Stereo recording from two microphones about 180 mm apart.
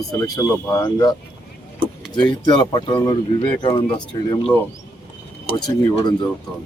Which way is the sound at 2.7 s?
25° left (ahead or behind).